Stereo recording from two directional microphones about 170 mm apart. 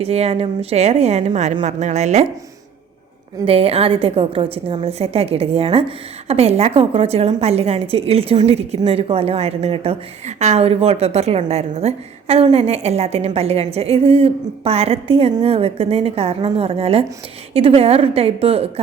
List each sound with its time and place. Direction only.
0.0 s a woman's voice: 40° right (ahead or behind)
3.4 s a woman's voice: 35° right (ahead or behind)